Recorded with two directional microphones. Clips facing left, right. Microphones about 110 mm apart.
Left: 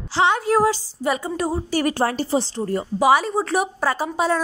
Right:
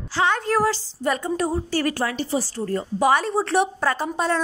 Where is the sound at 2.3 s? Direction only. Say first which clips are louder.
Left 1 dB; 20° left (ahead or behind).